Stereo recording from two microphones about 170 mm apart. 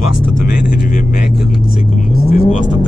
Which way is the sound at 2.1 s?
65° left (ahead or behind).